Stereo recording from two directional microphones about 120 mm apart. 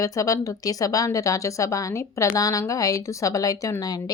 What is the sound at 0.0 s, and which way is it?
Speech, 30° left (ahead or behind).